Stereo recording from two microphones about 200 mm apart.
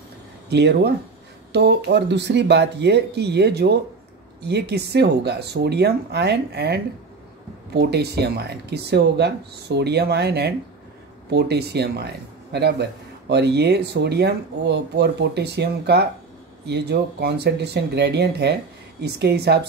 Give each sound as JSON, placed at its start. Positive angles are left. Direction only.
{"t": 0.5, "sound": "speech", "side_deg": -55}